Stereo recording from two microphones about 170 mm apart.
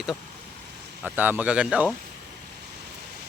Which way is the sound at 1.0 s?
10° right (ahead or behind).